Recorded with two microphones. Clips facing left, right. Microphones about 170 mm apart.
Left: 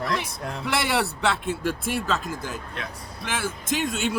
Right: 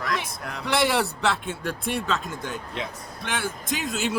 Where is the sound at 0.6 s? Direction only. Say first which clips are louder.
Right 2 dB; centre (ahead or behind).